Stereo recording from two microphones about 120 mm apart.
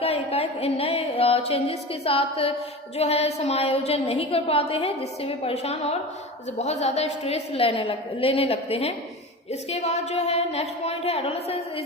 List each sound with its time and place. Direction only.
0.0 s a woman's voice: 55° left (ahead or behind)